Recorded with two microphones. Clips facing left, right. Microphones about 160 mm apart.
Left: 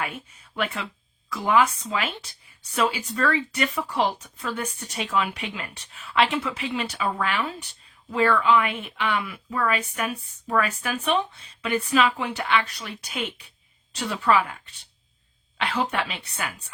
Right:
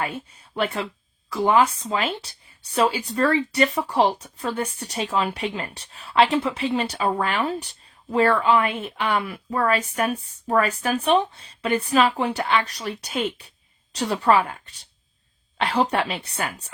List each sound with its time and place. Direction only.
0.0 s speech: 35° right (ahead or behind)